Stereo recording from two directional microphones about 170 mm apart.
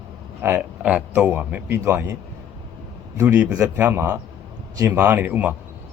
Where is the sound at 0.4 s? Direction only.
10° right (ahead or behind).